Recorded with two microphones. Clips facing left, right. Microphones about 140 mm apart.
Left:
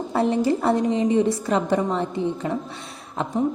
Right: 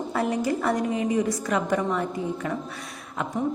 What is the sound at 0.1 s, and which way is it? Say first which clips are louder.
A woman's voice: left 5 dB; 30° left (ahead or behind).